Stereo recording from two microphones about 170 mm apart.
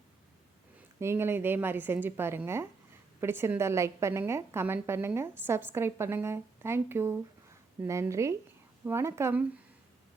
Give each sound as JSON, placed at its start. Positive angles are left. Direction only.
{"t": 0.9, "sound": "a woman's voice", "side_deg": -15}